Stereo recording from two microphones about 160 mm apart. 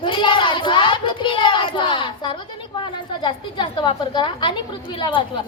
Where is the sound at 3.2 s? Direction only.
30° left (ahead or behind).